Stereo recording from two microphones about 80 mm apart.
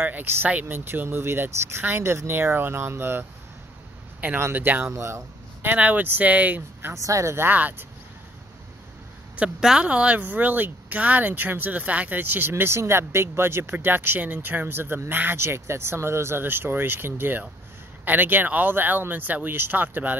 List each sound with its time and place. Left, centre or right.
0.0 s speech: right
4.4 s speech: right
4.9 s speech: right
5.6 s speech: right
6.9 s speech: right
7.4 s speech: right
9.4 s speech: centre